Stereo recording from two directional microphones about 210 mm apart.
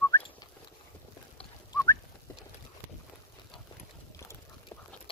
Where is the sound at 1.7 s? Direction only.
15° left (ahead or behind).